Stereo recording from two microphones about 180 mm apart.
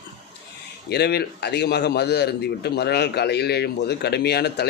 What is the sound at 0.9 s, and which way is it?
A man's voice, 65° left (ahead or behind).